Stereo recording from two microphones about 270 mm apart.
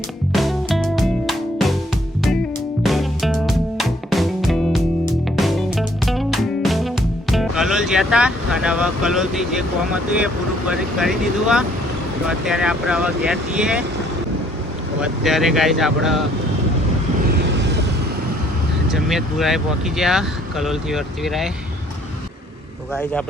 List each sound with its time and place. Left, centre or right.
0.3 s music: centre
2.8 s music: centre
10.7 s speech: centre
15.0 s speech: centre
17.2 s vehicle: right
18.9 s speech: centre